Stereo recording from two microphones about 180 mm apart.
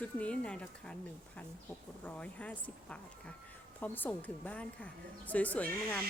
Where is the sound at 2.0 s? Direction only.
5° left (ahead or behind).